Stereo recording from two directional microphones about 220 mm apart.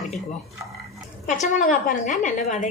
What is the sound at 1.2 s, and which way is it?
A woman's voice, 35° left (ahead or behind).